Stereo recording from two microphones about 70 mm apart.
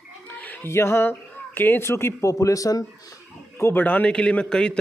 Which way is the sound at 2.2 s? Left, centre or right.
Left.